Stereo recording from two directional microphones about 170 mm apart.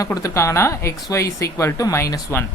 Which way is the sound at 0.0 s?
20° left (ahead or behind).